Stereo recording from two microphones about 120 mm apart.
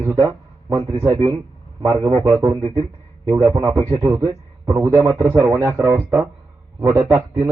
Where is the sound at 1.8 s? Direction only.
25° right (ahead or behind).